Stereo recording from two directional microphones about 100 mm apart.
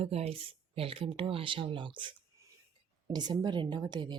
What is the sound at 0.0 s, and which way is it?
A woman's voice, 90° right.